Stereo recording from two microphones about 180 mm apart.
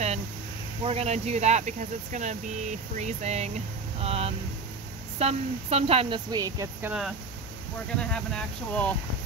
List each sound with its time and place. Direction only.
0.8 s speech: 35° right (ahead or behind); by 6.9 s 20° right (ahead or behind)
6.9 s speech: centre (ahead or behind)